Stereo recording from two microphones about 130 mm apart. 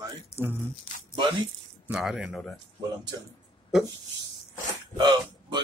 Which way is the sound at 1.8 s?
5° right (ahead or behind).